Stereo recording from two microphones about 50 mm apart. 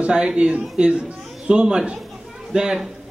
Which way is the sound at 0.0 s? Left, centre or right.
Centre.